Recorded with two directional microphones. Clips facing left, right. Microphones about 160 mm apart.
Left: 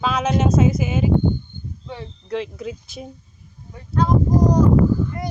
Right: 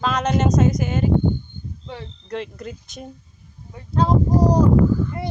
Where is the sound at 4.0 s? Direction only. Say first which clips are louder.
Even; 30° right (ahead or behind).